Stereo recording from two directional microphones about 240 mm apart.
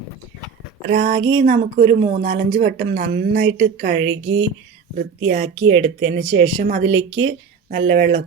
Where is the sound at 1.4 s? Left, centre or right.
Right.